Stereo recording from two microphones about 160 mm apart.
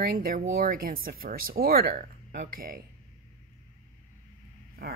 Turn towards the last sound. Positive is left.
turn(degrees=-75)  # may be behind; listen again after turning